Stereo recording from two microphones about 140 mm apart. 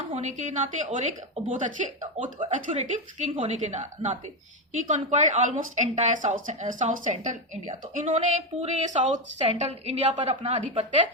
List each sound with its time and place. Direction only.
0.1 s a woman's voice: 55° right (ahead or behind)